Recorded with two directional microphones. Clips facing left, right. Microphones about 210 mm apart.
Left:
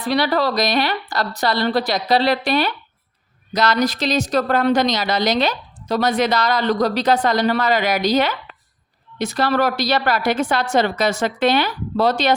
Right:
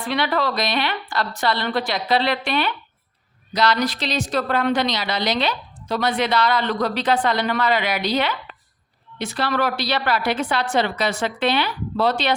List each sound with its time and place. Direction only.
0.0 s a woman's voice: 40° left (ahead or behind)